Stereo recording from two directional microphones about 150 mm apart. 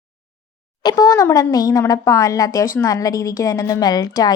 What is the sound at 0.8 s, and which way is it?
Speech, 25° left (ahead or behind).